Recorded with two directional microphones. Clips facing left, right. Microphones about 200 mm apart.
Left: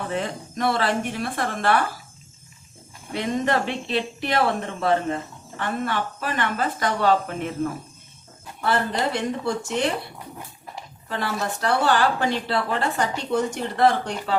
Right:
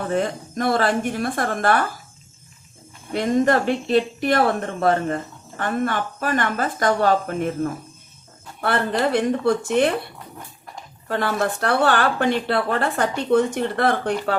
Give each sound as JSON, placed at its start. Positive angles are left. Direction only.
{"t": 0.1, "sound": "a woman's voice", "side_deg": -45}
{"t": 3.1, "sound": "a woman's voice", "side_deg": -45}
{"t": 8.6, "sound": "speech", "side_deg": -60}
{"t": 11.1, "sound": "speech", "side_deg": -60}